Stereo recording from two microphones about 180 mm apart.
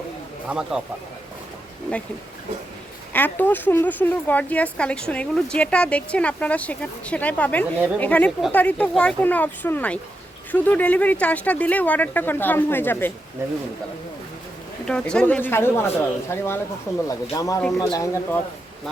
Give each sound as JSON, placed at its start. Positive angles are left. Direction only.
{"t": 0.4, "sound": "speech", "side_deg": -5}
{"t": 3.1, "sound": "a woman's voice", "side_deg": 10}
{"t": 14.8, "sound": "a woman's voice", "side_deg": 5}